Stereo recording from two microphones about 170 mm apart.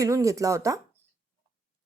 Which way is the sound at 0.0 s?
20° right (ahead or behind).